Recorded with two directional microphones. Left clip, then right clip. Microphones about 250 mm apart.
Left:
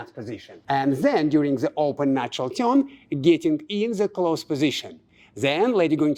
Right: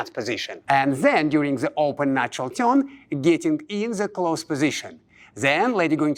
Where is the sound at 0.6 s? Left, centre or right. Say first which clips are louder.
Right 2 dB; right.